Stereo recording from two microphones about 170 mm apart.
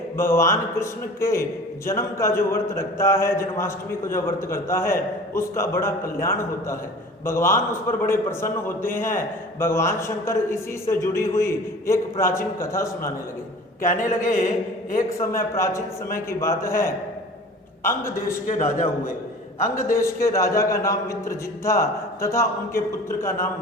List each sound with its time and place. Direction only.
0.2 s a man's voice: 15° left (ahead or behind)
13.8 s a man's voice: 50° left (ahead or behind)
15.5 s a man's voice: 15° left (ahead or behind)
18.4 s a man's voice: 45° left (ahead or behind)
20.2 s a man's voice: 15° left (ahead or behind)